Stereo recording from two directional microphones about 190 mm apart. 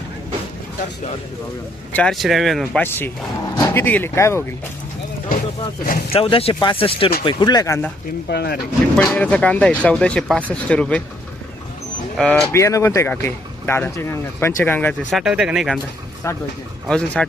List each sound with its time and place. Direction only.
1.9 s speech: 5° left (ahead or behind)
6.1 s speech: 30° left (ahead or behind)
8.3 s speech: 60° left (ahead or behind)
9.0 s speech: 10° left (ahead or behind)
12.1 s speech: 5° left (ahead or behind)
15.2 s speech: 5° right (ahead or behind)
16.2 s speech: 15° left (ahead or behind)
16.8 s speech: 5° left (ahead or behind)